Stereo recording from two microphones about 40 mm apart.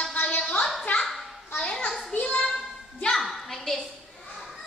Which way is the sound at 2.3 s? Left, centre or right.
Left.